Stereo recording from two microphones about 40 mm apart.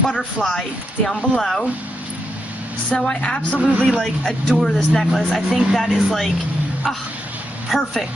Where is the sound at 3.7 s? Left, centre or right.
Right.